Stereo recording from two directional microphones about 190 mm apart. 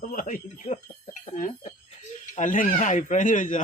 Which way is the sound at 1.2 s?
40° left (ahead or behind).